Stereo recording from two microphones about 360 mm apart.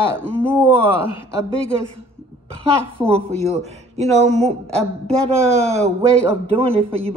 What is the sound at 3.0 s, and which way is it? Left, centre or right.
Speech, centre.